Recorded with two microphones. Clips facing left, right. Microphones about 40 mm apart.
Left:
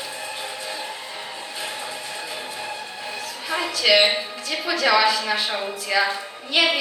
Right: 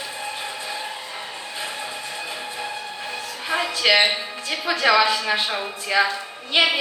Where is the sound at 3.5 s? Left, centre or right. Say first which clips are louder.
Even; right.